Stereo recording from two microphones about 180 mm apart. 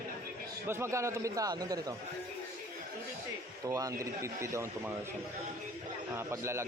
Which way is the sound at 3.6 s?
20° right (ahead or behind).